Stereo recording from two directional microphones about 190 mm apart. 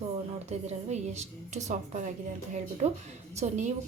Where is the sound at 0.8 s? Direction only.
35° right (ahead or behind).